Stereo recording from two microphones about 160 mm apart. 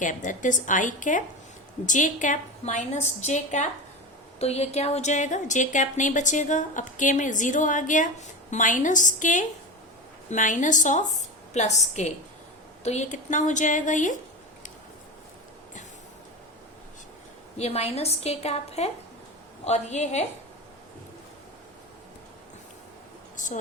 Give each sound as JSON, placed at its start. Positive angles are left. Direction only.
{"t": 0.0, "sound": "a woman's voice", "side_deg": 55}
{"t": 17.6, "sound": "a woman's voice", "side_deg": 40}